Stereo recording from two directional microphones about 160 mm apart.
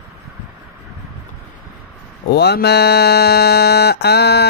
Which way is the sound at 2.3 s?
85° left.